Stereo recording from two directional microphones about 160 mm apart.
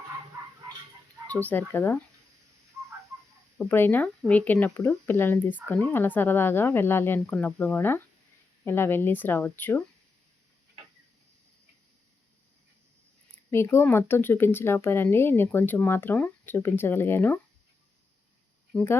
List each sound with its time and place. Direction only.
1.3 s speech: 10° left (ahead or behind)
3.6 s speech: 15° left (ahead or behind)
13.5 s speech: 15° left (ahead or behind)